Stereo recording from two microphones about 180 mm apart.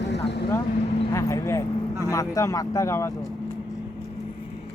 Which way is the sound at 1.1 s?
20° left (ahead or behind).